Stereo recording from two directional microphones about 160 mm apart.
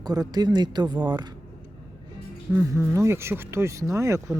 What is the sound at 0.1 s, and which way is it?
Speech, 25° right (ahead or behind).